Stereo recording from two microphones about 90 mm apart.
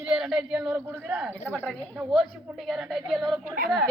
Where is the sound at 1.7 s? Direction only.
5° right (ahead or behind).